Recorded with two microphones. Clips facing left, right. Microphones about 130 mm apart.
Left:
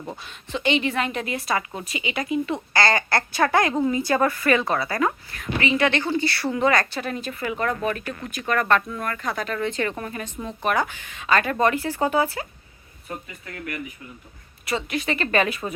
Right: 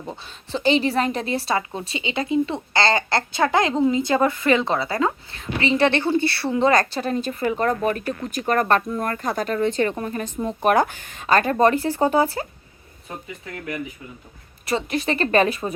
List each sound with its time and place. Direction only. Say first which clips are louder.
0.3 s a woman's voice: right 4 dB; 30° right (ahead or behind)
10.6 s speech: right 5 dB; 45° right (ahead or behind)
14.6 s speech: right 3 dB; 35° right (ahead or behind)